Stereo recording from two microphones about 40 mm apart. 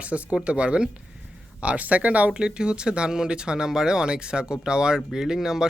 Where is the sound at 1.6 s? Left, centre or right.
Right.